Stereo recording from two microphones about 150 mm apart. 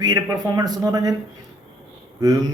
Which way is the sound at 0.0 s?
25° right (ahead or behind).